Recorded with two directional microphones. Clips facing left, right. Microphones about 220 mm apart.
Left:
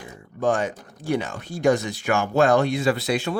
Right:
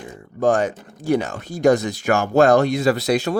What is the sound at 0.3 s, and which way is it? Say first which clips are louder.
Speech: right 4 dB; 40° right (ahead or behind).